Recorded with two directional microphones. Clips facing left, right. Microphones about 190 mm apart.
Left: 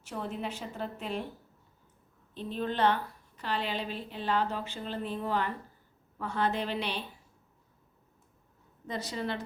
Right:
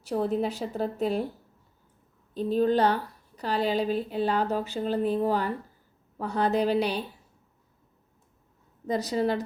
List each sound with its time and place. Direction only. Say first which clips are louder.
0.0 s a woman's voice: right 10 dB; 35° right (ahead or behind)
2.3 s a woman's voice: right 10 dB; 40° right (ahead or behind)
8.9 s a woman's voice: right 9 dB; 40° right (ahead or behind)